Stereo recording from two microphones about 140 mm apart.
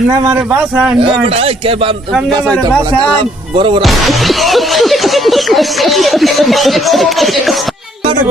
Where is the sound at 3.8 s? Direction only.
Centre (ahead or behind).